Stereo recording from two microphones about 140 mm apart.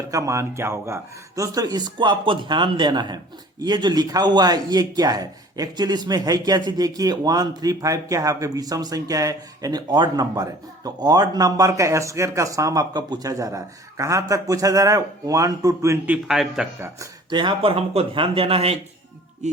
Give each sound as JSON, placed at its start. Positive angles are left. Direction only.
{"t": 0.1, "sound": "a man's voice", "side_deg": -20}
{"t": 17.2, "sound": "speech", "side_deg": -35}